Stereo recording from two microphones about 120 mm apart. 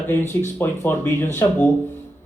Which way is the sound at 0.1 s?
20° left (ahead or behind).